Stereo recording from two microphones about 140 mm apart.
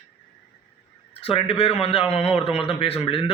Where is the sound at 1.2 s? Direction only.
45° left (ahead or behind).